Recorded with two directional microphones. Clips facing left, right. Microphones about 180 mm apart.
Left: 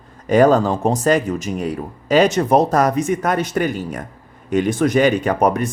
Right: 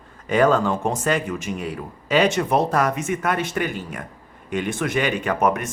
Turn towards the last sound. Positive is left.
turn(degrees=35)  # may be behind; listen again after turning